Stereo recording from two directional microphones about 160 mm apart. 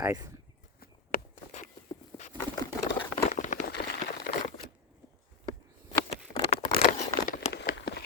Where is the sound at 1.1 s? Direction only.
55° left (ahead or behind).